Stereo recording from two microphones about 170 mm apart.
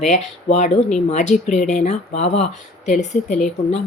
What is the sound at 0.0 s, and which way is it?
Speech, 45° left (ahead or behind).